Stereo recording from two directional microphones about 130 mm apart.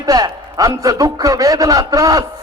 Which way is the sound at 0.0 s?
30° right (ahead or behind).